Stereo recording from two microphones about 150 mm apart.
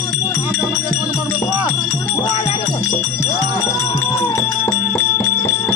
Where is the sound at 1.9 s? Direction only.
20° left (ahead or behind).